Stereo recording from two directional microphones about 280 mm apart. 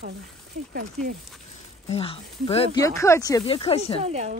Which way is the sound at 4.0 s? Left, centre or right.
Right.